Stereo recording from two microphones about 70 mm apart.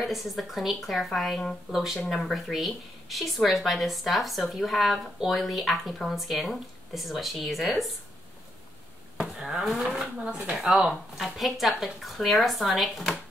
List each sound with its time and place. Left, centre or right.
0.0 s speech: centre
9.4 s speech: centre
10.1 s speech: centre
10.6 s speech: centre